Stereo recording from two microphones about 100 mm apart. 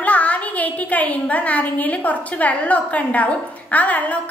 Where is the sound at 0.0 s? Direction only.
15° left (ahead or behind).